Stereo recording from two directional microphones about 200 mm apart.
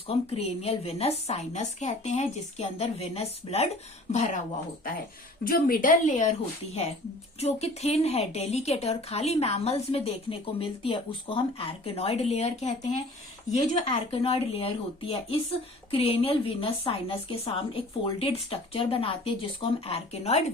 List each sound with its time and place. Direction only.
0.1 s a woman's voice: 30° left (ahead or behind)
5.5 s a woman's voice: 45° left (ahead or behind)
7.3 s a woman's voice: 30° left (ahead or behind)